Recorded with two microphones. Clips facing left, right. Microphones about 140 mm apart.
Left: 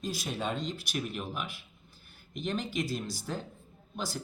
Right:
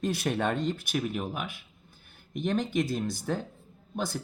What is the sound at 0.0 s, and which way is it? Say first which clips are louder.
Speech: right 6 dB; 60° right (ahead or behind).